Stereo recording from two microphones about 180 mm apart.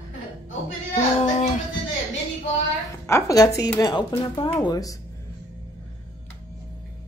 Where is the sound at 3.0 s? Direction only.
15° left (ahead or behind).